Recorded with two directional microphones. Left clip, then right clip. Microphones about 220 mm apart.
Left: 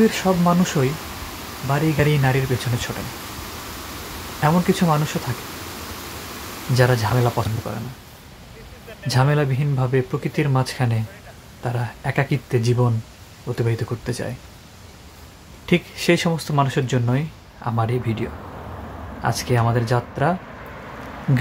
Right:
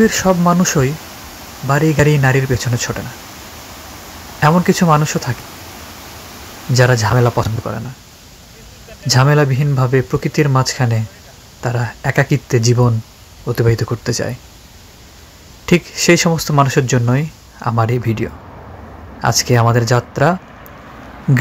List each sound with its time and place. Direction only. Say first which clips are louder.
0.1 s speech: right 6 dB; 20° right (ahead or behind)
4.4 s speech: right 6 dB; 20° right (ahead or behind)
6.7 s speech: right 6 dB; 20° right (ahead or behind)
9.0 s speech: right 7 dB; 20° right (ahead or behind)
15.6 s speech: right 7 dB; 25° right (ahead or behind)
19.2 s speech: right 8 dB; 25° right (ahead or behind)